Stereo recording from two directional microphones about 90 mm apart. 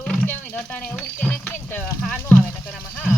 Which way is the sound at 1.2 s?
15° left (ahead or behind).